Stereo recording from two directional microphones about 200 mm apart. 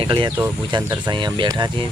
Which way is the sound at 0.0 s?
25° right (ahead or behind).